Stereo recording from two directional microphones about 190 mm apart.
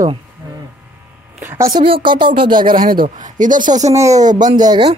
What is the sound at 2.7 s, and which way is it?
Speech, 50° right (ahead or behind).